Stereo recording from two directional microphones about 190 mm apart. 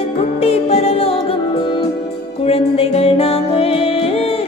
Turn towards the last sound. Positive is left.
turn(degrees=30)  # may be behind; listen again after turning